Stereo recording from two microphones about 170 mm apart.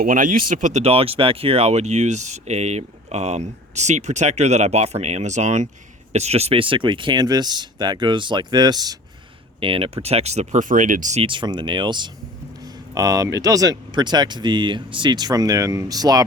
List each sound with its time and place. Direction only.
0.0 s speech: 55° right (ahead or behind); by 16.2 s 20° right (ahead or behind)